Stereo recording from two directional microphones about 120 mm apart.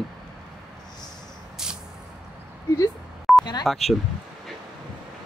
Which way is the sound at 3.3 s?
Centre (ahead or behind).